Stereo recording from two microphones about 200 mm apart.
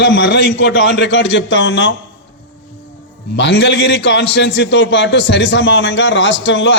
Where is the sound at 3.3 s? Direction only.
60° left (ahead or behind).